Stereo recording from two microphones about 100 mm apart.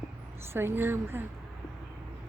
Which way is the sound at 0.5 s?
25° right (ahead or behind).